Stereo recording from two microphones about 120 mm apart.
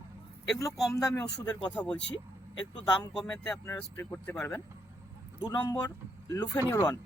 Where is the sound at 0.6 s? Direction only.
30° left (ahead or behind).